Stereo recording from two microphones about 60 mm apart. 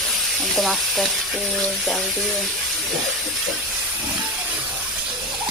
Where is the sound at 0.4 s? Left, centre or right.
Centre.